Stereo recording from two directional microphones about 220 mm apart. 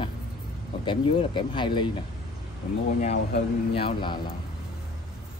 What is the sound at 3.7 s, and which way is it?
Speech, 25° left (ahead or behind).